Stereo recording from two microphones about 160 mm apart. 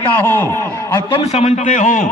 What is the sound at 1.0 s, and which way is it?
A man's voice, 35° left (ahead or behind).